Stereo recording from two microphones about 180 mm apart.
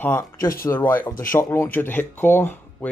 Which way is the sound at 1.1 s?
50° left (ahead or behind).